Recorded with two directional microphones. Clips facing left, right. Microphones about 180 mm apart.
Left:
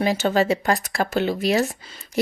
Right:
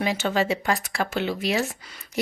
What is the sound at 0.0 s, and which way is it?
Speech, 40° left (ahead or behind).